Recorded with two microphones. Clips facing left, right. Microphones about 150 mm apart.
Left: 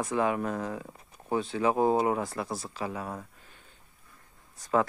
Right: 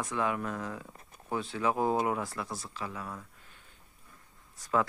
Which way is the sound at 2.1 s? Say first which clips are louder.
Left 4 dB; 30° left (ahead or behind).